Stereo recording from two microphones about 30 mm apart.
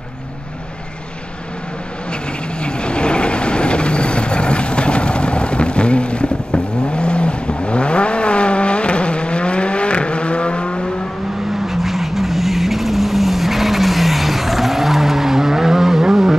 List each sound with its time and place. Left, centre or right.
2.6 s vehicle: left
11.6 s vehicle: centre